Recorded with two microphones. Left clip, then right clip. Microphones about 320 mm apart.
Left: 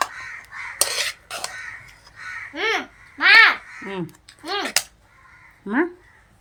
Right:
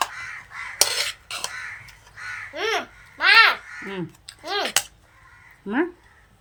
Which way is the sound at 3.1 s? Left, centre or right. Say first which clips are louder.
Left 2 dB; right.